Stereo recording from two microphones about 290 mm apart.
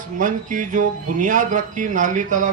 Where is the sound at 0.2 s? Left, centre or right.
Right.